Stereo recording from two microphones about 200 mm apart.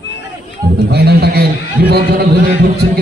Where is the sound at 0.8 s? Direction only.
55° right (ahead or behind).